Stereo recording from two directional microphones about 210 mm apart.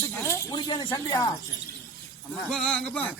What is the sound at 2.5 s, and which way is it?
Speech, 5° left (ahead or behind).